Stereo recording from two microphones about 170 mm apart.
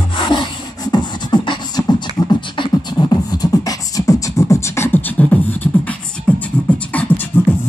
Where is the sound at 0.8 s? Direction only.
25° left (ahead or behind); by 6.4 s 10° left (ahead or behind).